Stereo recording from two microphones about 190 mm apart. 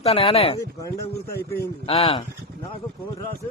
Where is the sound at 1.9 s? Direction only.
30° left (ahead or behind).